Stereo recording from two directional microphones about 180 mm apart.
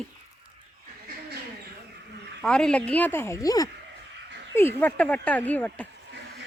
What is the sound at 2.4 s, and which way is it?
Speech, 5° left (ahead or behind).